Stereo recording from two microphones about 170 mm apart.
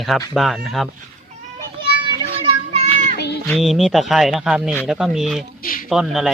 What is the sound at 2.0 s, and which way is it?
Children playing, 35° right (ahead or behind).